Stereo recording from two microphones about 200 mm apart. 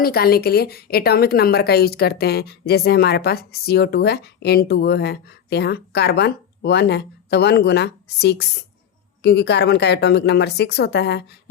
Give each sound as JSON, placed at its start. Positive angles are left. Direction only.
{"t": 0.0, "sound": "a woman's voice", "side_deg": 50}